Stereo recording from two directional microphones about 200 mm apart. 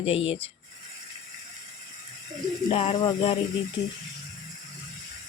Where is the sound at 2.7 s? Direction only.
25° left (ahead or behind).